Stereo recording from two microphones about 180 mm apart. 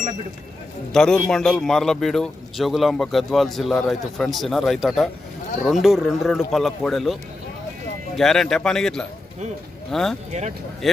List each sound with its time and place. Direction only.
0.9 s a man's voice: 5° left (ahead or behind)
8.2 s a man's voice: centre (ahead or behind)
10.3 s speech: 40° right (ahead or behind)